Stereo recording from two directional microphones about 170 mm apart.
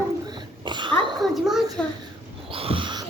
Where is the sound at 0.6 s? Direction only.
25° right (ahead or behind).